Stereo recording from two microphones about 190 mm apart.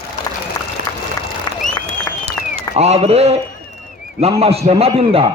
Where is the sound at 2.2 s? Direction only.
35° right (ahead or behind).